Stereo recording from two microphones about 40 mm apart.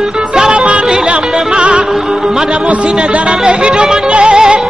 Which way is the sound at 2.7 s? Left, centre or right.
Right.